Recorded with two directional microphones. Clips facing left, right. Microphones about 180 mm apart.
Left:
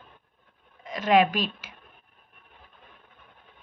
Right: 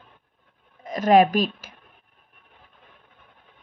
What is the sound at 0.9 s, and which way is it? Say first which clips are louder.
Speech: right 4 dB; 40° right (ahead or behind).